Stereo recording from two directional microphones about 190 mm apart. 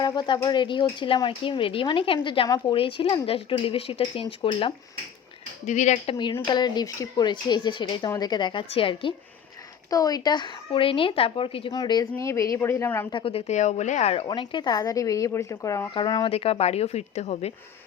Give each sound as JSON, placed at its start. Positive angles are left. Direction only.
{"t": 0.0, "sound": "speech", "side_deg": 25}
{"t": 13.1, "sound": "speech", "side_deg": 30}